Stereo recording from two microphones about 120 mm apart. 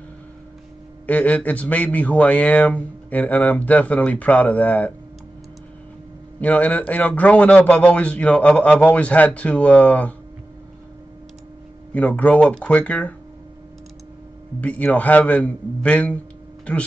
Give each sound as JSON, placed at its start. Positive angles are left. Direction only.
{"t": 1.0, "sound": "a man's voice", "side_deg": 10}
{"t": 6.4, "sound": "a man's voice", "side_deg": 10}
{"t": 11.9, "sound": "a man's voice", "side_deg": 10}
{"t": 14.6, "sound": "a man's voice", "side_deg": 10}